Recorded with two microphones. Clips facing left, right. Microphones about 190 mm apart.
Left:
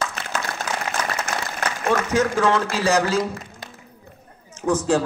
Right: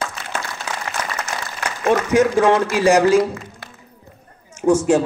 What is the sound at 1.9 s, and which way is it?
A man's voice, 15° right (ahead or behind).